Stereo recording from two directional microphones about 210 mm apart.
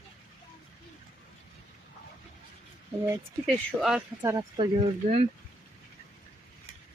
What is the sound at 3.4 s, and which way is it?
Speech, centre (ahead or behind).